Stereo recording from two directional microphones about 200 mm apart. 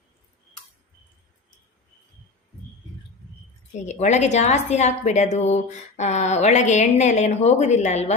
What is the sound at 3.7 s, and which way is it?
A woman's voice, 35° left (ahead or behind).